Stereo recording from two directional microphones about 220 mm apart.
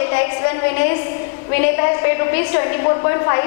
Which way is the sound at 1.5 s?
15° left (ahead or behind).